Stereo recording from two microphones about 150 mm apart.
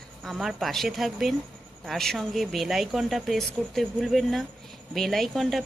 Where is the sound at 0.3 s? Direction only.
Centre (ahead or behind).